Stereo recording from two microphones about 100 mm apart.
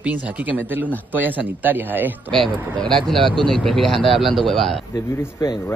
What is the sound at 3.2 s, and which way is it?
Speech, 55° right (ahead or behind).